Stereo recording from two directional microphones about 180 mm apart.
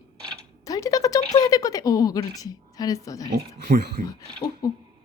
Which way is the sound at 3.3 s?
65° right (ahead or behind).